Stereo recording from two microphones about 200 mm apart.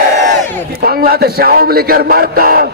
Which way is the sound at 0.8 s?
50° right (ahead or behind).